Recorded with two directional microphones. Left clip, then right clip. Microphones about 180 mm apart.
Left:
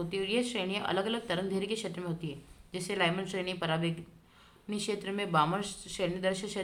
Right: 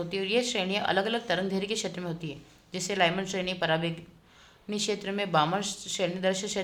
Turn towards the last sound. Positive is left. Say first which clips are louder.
# right 4 dB
turn(degrees=-15)  # may be behind; listen again after turning